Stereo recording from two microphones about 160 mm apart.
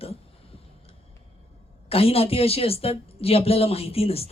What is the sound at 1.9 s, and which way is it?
A woman's voice, 35° left (ahead or behind).